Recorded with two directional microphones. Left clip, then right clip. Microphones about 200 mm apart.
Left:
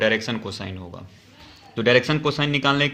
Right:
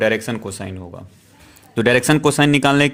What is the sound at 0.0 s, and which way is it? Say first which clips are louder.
Speech: right 3 dB; 40° right (ahead or behind).